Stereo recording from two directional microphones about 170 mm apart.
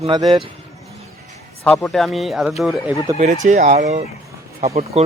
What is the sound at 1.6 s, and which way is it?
Speech, centre (ahead or behind).